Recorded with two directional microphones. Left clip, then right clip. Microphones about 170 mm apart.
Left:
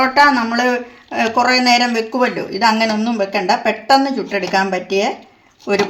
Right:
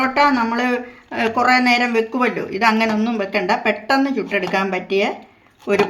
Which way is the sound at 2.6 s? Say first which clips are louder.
Left 2 dB; 20° left (ahead or behind).